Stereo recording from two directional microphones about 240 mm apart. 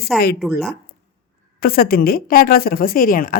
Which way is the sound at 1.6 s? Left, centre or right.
Left.